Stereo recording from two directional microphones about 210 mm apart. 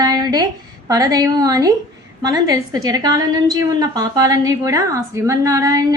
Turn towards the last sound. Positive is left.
turn(degrees=-15)  # may be behind; listen again after turning